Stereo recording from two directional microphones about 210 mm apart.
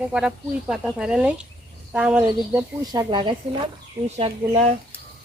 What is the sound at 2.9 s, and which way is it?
A woman's voice, 20° right (ahead or behind).